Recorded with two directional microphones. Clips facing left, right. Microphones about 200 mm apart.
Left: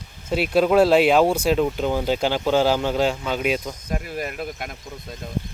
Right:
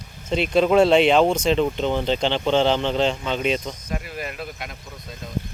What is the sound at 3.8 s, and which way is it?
Speech, 40° left (ahead or behind).